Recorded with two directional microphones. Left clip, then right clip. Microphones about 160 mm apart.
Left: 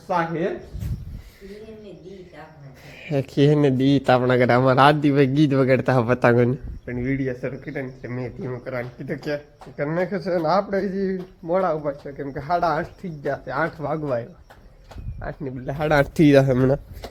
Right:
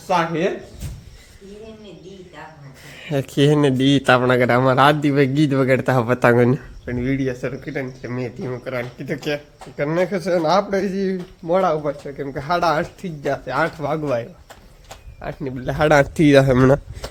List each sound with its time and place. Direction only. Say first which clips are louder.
0.1 s speech: right 4 dB; 10° right (ahead or behind)
3.0 s a man's voice: right 2 dB; centre (ahead or behind)
6.9 s speech: right 3 dB; 10° right (ahead or behind)
15.3 s speech: right 4 dB; 15° right (ahead or behind)
16.0 s a man's voice: right 1 dB; 5° left (ahead or behind)
16.3 s speech: right 4 dB; 10° right (ahead or behind)
16.6 s speech: right 5 dB; 20° right (ahead or behind)